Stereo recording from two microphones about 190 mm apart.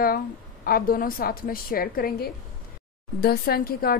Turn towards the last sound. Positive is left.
turn(degrees=50)  # may be behind; listen again after turning